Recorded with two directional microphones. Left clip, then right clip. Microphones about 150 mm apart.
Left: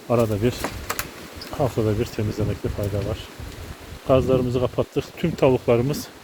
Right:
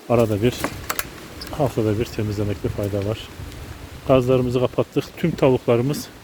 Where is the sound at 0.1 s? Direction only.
20° right (ahead or behind).